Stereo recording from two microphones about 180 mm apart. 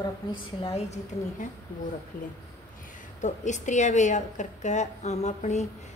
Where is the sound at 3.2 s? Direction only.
40° left (ahead or behind).